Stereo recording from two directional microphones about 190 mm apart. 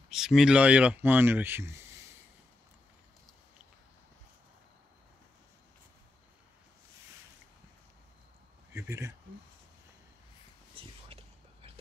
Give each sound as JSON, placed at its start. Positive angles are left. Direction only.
{"t": 0.1, "sound": "speech", "side_deg": 0}
{"t": 8.7, "sound": "speech", "side_deg": -15}
{"t": 10.7, "sound": "a sound", "side_deg": -30}